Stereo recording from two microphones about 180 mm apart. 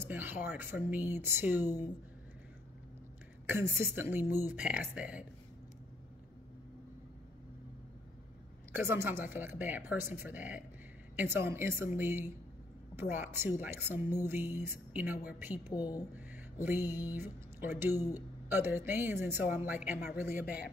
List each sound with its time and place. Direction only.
0.0 s speech: 10° right (ahead or behind)
3.4 s speech: 10° right (ahead or behind)
8.7 s speech: 10° right (ahead or behind)
15.7 s a woman's voice: 20° left (ahead or behind)
16.2 s speech: 10° right (ahead or behind)